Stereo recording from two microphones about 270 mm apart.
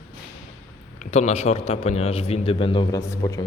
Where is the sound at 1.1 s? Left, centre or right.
Left.